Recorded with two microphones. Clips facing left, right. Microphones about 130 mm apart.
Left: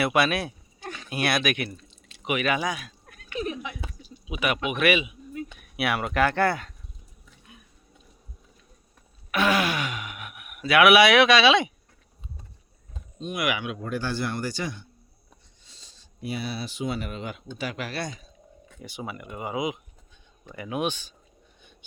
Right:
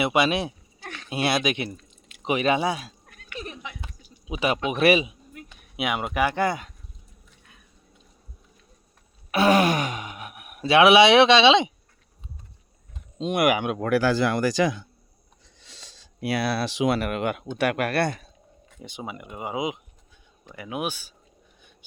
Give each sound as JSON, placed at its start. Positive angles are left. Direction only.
{"t": 0.0, "sound": "speech", "side_deg": -20}
{"t": 1.9, "sound": "drip", "side_deg": 30}
{"t": 2.2, "sound": "speech", "side_deg": -30}
{"t": 4.3, "sound": "speech", "side_deg": -30}
{"t": 5.7, "sound": "speech", "side_deg": -15}
{"t": 9.3, "sound": "speech", "side_deg": -40}
{"t": 13.1, "sound": "speech", "side_deg": -90}
{"t": 13.4, "sound": "speech", "side_deg": -50}
{"t": 18.8, "sound": "speech", "side_deg": -20}
{"t": 20.5, "sound": "speech", "side_deg": -10}